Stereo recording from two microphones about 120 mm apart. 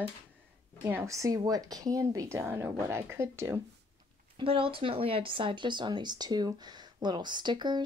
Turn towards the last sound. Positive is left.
turn(degrees=-40)  # may be behind; listen again after turning